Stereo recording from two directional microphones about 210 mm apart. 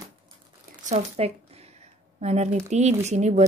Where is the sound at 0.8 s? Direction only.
30° right (ahead or behind).